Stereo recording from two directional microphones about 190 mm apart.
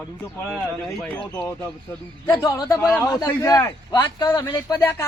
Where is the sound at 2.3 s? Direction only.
20° left (ahead or behind).